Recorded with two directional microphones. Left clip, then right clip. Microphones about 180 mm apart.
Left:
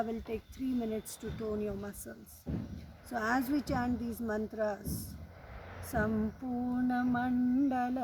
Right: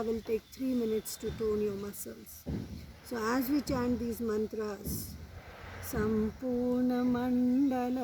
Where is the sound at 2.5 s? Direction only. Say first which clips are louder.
Right 1 dB; 40° right (ahead or behind).